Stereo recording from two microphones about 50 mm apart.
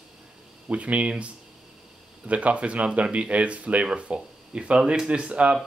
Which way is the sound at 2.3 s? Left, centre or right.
Right.